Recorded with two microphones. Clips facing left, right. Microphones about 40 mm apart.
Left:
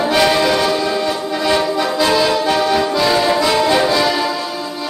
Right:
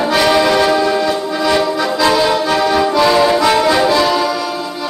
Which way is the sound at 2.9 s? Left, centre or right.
Right.